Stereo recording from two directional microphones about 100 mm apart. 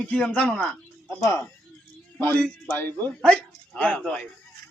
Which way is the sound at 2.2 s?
20° left (ahead or behind).